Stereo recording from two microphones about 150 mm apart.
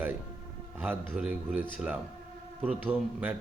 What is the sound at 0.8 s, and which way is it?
Speech, 10° right (ahead or behind).